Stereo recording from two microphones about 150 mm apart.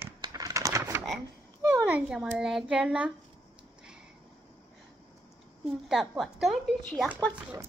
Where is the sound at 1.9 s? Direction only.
10° right (ahead or behind).